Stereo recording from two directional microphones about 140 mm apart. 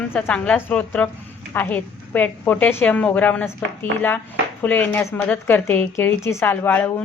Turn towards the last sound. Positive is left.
turn(degrees=15)  # may be behind; listen again after turning